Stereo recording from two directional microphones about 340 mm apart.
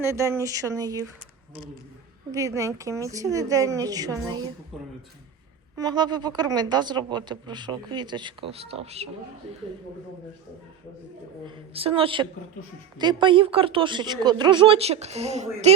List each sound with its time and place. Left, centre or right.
0.0 s speech: centre
2.3 s speech: centre
5.7 s speech: centre
11.4 s speech: centre